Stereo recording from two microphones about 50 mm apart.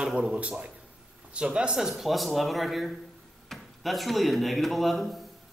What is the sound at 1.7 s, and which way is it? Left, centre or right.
Speech, centre.